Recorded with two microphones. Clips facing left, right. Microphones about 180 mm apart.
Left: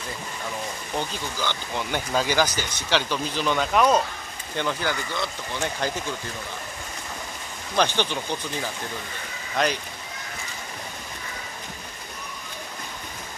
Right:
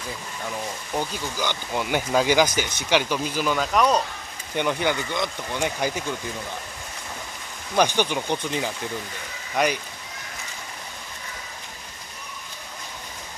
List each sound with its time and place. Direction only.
0.9 s speech: 10° right (ahead or behind); by 4.0 s 5° left (ahead or behind)
4.6 s speech: 15° right (ahead or behind)
7.7 s speech: 10° right (ahead or behind)